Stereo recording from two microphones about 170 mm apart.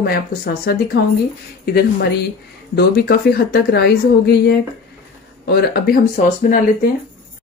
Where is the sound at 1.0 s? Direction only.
85° left.